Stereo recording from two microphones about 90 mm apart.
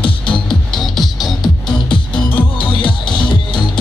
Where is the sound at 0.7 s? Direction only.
Centre (ahead or behind).